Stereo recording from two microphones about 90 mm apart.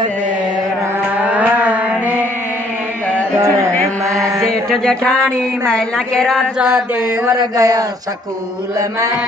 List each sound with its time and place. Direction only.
1.2 s mantra: 15° right (ahead or behind)
4.0 s mantra: 35° right (ahead or behind)
4.4 s mantra: 5° left (ahead or behind)
5.7 s a woman's voice: 5° left (ahead or behind)
7.2 s speech: 40° right (ahead or behind)